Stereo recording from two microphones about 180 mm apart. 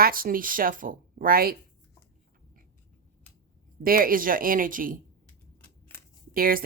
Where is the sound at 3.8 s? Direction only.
55° right (ahead or behind).